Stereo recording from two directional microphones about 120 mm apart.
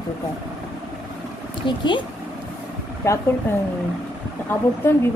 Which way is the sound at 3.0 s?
25° left (ahead or behind).